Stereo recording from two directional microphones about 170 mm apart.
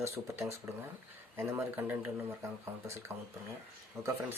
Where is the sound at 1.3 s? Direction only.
10° right (ahead or behind).